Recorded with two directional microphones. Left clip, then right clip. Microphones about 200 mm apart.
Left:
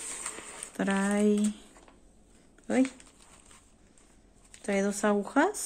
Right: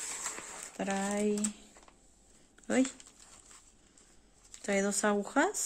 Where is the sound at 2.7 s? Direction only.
10° right (ahead or behind).